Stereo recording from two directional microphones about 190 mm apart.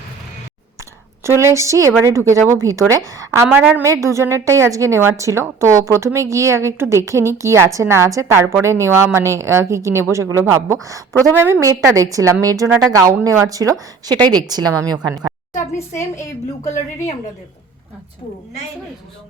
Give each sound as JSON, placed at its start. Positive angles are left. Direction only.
{"t": 1.4, "sound": "a woman's voice", "side_deg": -15}
{"t": 15.9, "sound": "a woman's voice", "side_deg": 15}